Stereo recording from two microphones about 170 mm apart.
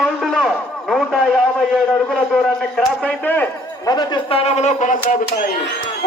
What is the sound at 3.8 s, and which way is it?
Speech, 25° left (ahead or behind).